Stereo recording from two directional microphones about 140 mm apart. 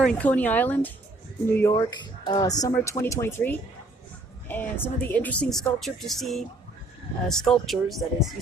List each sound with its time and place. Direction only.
0.0 s speech: 10° left (ahead or behind)